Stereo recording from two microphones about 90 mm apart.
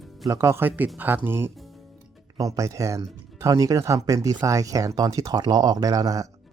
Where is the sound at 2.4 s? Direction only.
35° right (ahead or behind).